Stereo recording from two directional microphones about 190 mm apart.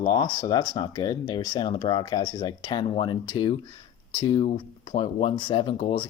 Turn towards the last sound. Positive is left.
turn(degrees=30)  # may be behind; listen again after turning